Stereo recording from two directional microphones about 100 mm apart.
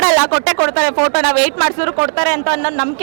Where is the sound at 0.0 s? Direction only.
10° left (ahead or behind).